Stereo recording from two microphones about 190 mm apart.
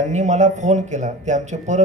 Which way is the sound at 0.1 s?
40° right (ahead or behind).